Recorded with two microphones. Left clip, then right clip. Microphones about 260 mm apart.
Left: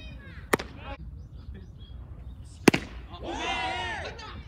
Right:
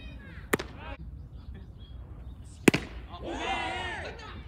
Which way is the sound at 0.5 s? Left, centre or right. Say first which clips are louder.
Left 3 dB; centre.